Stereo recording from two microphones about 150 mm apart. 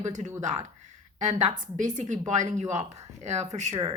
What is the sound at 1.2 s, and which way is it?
A woman's voice, 55° right (ahead or behind).